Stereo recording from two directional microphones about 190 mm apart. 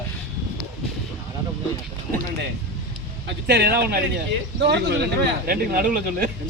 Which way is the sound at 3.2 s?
60° right (ahead or behind).